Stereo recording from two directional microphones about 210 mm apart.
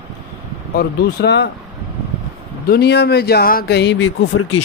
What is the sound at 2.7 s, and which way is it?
A man's voice, 50° left (ahead or behind).